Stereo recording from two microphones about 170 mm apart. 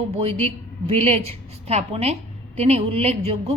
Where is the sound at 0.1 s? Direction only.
35° right (ahead or behind).